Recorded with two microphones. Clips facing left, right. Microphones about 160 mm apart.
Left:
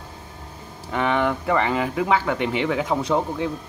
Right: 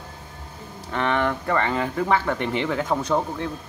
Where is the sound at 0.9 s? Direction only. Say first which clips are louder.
Left 2 dB; 10° left (ahead or behind).